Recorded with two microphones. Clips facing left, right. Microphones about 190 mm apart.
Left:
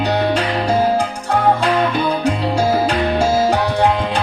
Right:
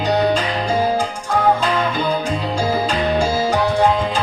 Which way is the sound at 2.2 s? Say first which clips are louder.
Left 4 dB; 65° left (ahead or behind).